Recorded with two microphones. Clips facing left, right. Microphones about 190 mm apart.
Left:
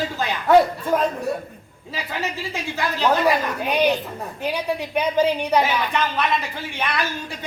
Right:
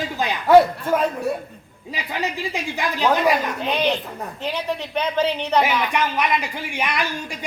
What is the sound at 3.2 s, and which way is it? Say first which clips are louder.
A woman's voice: even; 10° left (ahead or behind).